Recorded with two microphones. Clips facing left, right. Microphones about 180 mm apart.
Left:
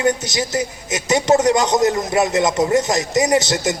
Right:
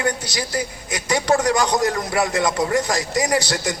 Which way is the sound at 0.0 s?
20° left (ahead or behind).